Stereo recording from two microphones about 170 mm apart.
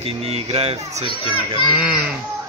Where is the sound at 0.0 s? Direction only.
35° right (ahead or behind).